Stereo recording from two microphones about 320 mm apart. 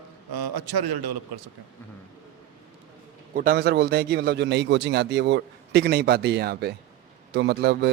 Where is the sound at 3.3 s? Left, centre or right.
Right.